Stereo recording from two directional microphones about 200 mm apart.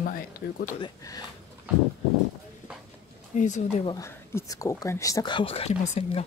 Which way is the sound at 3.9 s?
15° left (ahead or behind).